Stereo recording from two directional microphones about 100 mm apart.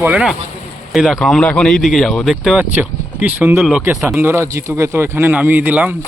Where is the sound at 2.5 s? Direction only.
15° right (ahead or behind).